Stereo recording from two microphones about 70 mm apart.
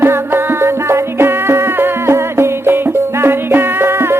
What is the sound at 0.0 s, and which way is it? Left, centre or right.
Music, right.